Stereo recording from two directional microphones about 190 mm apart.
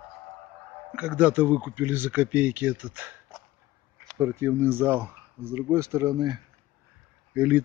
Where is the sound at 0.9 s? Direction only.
5° right (ahead or behind).